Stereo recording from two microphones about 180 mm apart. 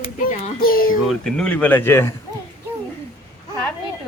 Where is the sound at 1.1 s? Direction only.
5° left (ahead or behind).